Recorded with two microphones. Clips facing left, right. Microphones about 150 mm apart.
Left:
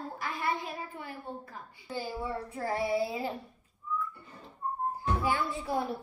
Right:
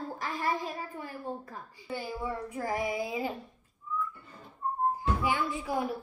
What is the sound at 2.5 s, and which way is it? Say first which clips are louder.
Speech: left 3 dB; 15° right (ahead or behind).